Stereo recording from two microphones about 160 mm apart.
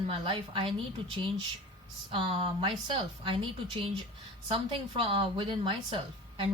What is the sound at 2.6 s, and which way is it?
Speech, 30° right (ahead or behind).